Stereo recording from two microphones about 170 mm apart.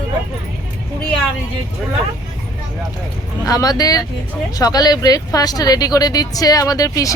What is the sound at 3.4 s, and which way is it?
Speech, 20° left (ahead or behind).